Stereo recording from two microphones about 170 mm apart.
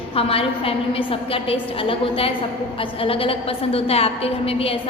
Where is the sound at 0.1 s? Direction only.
35° left (ahead or behind).